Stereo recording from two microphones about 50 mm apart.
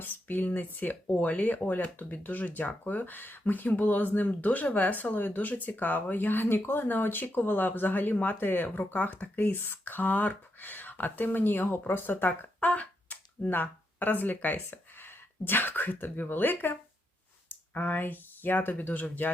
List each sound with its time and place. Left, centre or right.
0.0 s speech: left
12.5 s finger snapping: left
13.5 s speech: left